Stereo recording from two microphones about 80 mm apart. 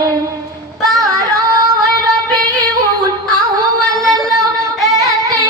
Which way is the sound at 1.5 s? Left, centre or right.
Right.